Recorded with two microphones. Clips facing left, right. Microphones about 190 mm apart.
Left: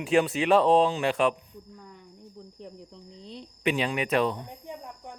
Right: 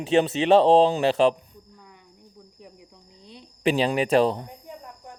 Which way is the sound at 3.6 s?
30° right (ahead or behind).